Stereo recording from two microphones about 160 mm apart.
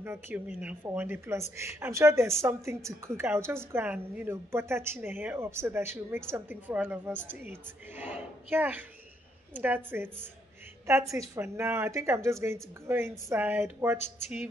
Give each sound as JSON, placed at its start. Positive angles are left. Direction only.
{"t": 0.0, "sound": "a woman's voice", "side_deg": -15}